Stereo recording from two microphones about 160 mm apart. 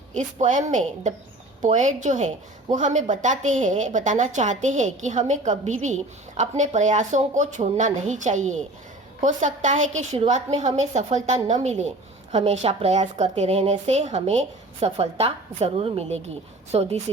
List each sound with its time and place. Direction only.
0.1 s a woman's voice: 50° right (ahead or behind)